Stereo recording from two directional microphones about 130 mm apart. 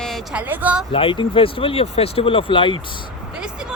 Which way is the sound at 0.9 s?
45° left (ahead or behind).